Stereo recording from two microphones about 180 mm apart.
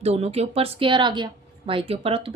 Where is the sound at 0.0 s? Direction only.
35° right (ahead or behind).